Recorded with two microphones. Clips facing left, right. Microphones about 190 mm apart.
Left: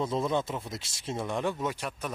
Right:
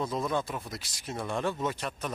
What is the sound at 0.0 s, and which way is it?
Speech, 25° left (ahead or behind).